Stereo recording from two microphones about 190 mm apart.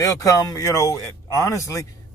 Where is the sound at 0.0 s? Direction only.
15° left (ahead or behind).